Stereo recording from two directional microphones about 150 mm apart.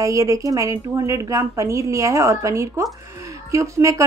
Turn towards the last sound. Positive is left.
turn(degrees=-20)  # may be behind; listen again after turning